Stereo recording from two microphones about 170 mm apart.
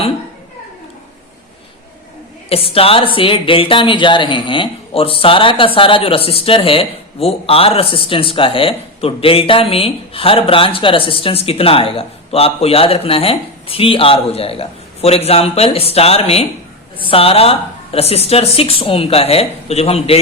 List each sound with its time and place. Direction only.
2.5 s speech: 35° left (ahead or behind)